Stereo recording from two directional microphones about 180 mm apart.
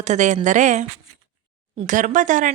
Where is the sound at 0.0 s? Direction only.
40° right (ahead or behind).